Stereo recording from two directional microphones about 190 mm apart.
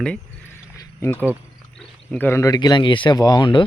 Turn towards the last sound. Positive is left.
turn(degrees=25)  # may be behind; listen again after turning